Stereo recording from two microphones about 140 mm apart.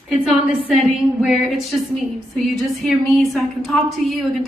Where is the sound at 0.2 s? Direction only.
Centre (ahead or behind).